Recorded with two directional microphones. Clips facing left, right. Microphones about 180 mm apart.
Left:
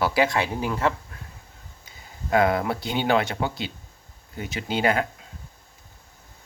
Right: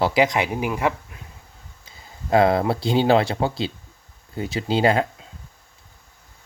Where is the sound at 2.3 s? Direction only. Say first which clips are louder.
Right 4 dB; 30° right (ahead or behind).